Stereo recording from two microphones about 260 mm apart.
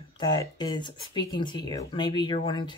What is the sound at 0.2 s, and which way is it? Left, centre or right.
Speech, centre.